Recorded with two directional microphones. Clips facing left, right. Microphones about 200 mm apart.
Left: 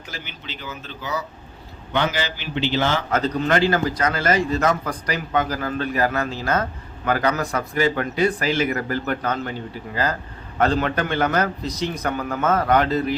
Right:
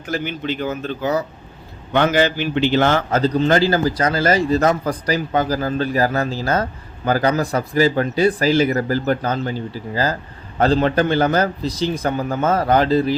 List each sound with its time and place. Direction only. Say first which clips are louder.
0.1 s speech: right 14 dB; 50° right (ahead or behind)
3.1 s a man's voice: right 4 dB; 30° right (ahead or behind)